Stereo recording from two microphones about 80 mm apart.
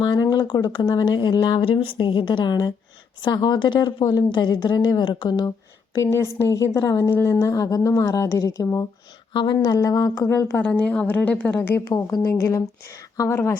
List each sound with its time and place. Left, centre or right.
0.2 s speech: left
0.7 s a woman's voice: left
3.8 s a woman's voice: left
6.0 s a woman's voice: left
9.3 s speech: left
9.7 s speech: left
10.2 s a woman's voice: left
10.6 s a woman's voice: centre
11.9 s a woman's voice: left